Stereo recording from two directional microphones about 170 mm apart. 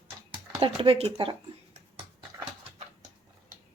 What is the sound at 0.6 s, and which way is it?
Speech, 35° right (ahead or behind).